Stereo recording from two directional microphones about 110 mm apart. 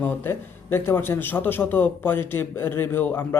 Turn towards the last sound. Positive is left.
turn(degrees=20)  # may be behind; listen again after turning